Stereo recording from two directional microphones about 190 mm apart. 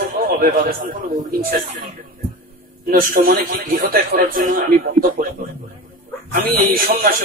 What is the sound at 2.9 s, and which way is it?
A man's voice, 45° right (ahead or behind).